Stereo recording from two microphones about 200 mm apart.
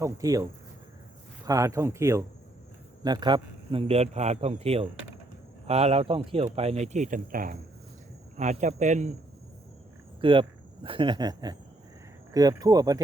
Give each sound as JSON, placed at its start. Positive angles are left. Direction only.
{"t": 0.0, "sound": "speech", "side_deg": -15}
{"t": 1.5, "sound": "a man's voice", "side_deg": -15}
{"t": 10.2, "sound": "a man's voice", "side_deg": -25}